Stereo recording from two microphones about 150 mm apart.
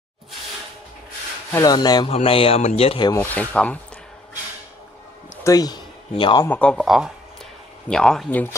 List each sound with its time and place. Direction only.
1.5 s speech: 25° left (ahead or behind)
2.0 s speech: 40° left (ahead or behind)
3.3 s rub: 10° left (ahead or behind)
5.4 s speech: 25° left (ahead or behind)
6.4 s rub: 10° left (ahead or behind)
6.8 s speech: 5° right (ahead or behind)